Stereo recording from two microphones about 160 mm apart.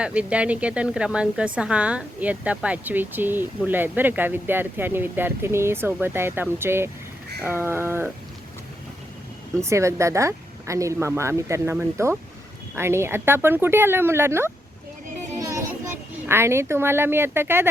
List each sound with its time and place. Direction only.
0.0 s a woman's voice: 10° right (ahead or behind)
9.6 s a woman's voice: 20° right (ahead or behind)
15.4 s children playing: 20° right (ahead or behind)
16.2 s a woman's voice: 15° right (ahead or behind)